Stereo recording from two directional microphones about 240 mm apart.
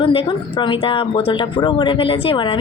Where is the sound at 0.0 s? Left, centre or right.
Left.